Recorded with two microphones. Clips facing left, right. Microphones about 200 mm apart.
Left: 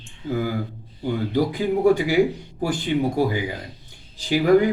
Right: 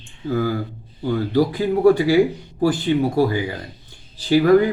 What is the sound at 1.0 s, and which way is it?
Speech, 15° left (ahead or behind).